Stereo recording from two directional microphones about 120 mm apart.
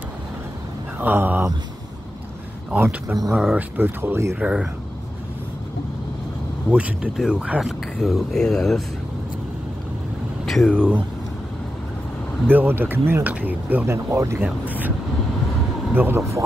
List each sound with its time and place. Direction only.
0.9 s speech: 15° right (ahead or behind)
2.7 s speech: 15° right (ahead or behind)
4.4 s speech: 10° right (ahead or behind)
6.7 s speech: 10° right (ahead or behind)
10.4 s a sound: centre (ahead or behind)
12.4 s speech: 15° right (ahead or behind)
14.4 s speech: 15° right (ahead or behind)
15.9 s speech: 20° right (ahead or behind)